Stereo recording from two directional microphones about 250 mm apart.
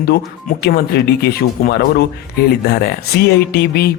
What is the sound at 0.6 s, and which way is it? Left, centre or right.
Speech, left.